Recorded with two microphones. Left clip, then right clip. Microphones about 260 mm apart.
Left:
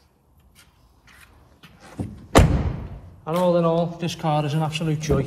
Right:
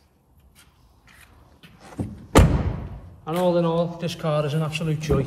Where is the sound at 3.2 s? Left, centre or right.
Centre.